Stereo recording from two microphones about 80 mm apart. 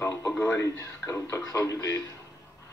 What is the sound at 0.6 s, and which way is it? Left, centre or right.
Speech, left.